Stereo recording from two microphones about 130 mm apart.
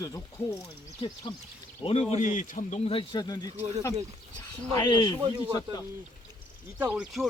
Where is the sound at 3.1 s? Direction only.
30° left (ahead or behind).